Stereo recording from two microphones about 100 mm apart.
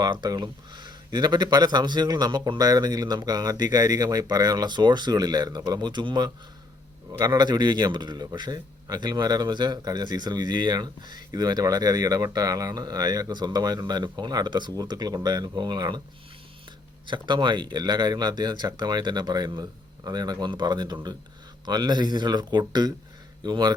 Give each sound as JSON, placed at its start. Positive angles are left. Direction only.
{"t": 0.0, "sound": "a man's voice", "side_deg": -45}
{"t": 17.1, "sound": "a man's voice", "side_deg": -50}